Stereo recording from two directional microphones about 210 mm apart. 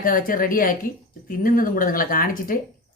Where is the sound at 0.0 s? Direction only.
40° left (ahead or behind).